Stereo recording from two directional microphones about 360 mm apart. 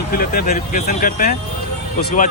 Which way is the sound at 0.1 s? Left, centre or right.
Left.